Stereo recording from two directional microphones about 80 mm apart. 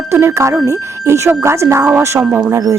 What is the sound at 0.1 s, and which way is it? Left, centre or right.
Speech, right.